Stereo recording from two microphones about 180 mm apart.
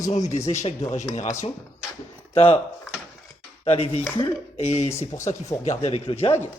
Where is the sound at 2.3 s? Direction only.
30° left (ahead or behind).